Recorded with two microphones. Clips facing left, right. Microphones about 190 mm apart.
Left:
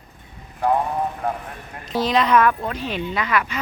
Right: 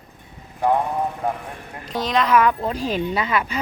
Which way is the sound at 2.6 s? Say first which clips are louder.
Right 3 dB; 35° right (ahead or behind).